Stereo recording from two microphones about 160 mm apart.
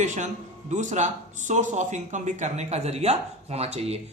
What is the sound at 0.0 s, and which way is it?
Speech, 50° right (ahead or behind).